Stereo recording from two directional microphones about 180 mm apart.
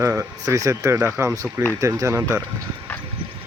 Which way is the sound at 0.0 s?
15° right (ahead or behind).